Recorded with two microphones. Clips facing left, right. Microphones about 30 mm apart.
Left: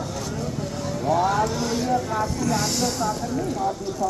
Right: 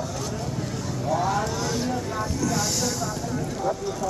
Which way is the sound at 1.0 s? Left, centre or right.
Left.